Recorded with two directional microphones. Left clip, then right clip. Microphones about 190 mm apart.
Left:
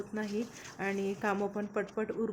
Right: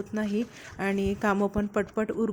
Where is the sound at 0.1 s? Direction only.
40° right (ahead or behind).